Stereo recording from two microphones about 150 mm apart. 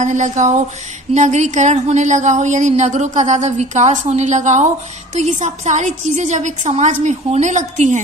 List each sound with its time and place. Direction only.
0.0 s speech: 55° right (ahead or behind)